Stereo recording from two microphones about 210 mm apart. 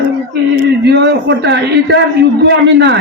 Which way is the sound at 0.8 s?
55° right (ahead or behind).